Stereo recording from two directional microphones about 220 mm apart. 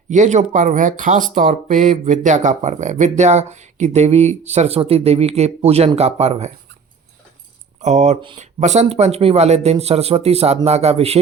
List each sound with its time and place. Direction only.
0.1 s speech: 35° right (ahead or behind)
7.8 s speech: 30° right (ahead or behind)